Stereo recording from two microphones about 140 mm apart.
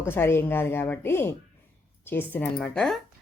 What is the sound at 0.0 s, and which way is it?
Speech, 15° left (ahead or behind).